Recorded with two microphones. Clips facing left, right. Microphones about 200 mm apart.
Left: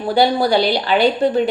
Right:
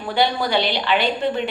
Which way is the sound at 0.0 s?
35° left (ahead or behind).